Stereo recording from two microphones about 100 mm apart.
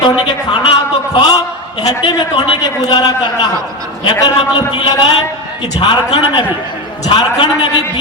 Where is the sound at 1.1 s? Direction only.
45° left (ahead or behind).